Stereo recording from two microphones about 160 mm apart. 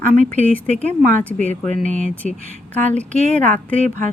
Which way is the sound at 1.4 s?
50° right (ahead or behind).